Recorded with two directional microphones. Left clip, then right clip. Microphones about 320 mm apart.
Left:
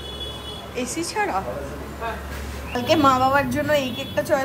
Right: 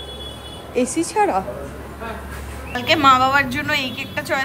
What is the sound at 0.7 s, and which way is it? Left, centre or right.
Speech, centre.